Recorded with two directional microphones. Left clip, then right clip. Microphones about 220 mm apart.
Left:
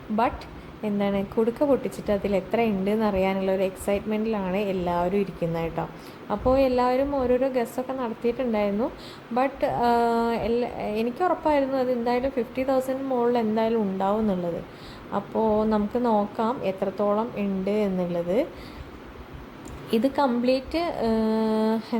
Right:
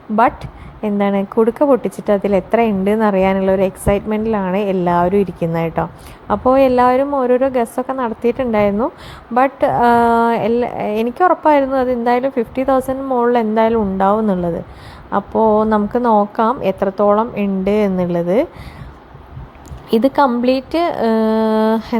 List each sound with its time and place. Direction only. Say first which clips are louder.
0.8 s a woman's voice: right 9 dB; 25° right (ahead or behind)
19.9 s a woman's voice: right 10 dB; 25° right (ahead or behind)